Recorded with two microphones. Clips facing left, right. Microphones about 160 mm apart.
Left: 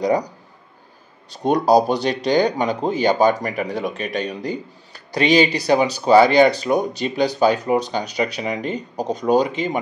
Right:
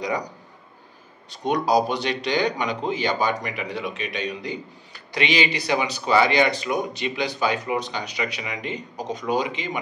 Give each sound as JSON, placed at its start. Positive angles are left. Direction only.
{"t": 1.4, "sound": "speech", "side_deg": 35}